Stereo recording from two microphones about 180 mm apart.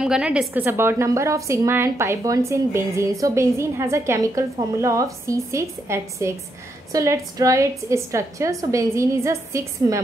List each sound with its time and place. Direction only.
0.0 s a woman's voice: 5° right (ahead or behind)